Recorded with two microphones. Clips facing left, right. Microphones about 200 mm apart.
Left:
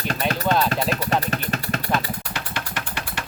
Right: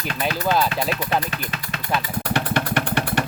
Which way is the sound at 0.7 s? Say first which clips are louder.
Left 1 dB; 40° left (ahead or behind).